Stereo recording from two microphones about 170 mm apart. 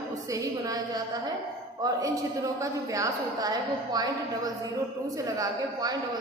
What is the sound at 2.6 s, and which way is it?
A woman's voice, 20° right (ahead or behind).